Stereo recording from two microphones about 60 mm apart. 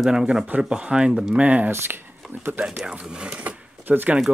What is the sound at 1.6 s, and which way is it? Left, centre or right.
Speech, right.